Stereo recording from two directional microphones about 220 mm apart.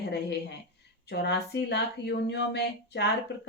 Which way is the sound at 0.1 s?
50° left (ahead or behind).